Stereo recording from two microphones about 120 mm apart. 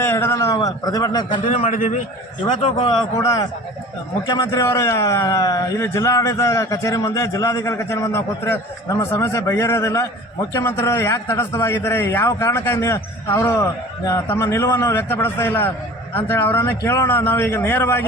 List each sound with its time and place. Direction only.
0.0 s speech: 20° left (ahead or behind); by 1.5 s 40° left (ahead or behind)
1.5 s a man's voice: 65° left (ahead or behind)
2.8 s speech: 30° left (ahead or behind)
4.3 s a man's voice: 40° left (ahead or behind)
4.6 s speech: 25° left (ahead or behind)